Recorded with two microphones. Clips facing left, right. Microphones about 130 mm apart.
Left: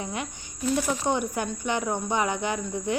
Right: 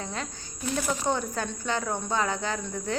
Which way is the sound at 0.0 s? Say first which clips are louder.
Left 2 dB; 15° left (ahead or behind).